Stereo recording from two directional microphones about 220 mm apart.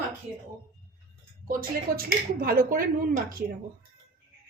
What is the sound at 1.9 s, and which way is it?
A woman's voice, 45° right (ahead or behind).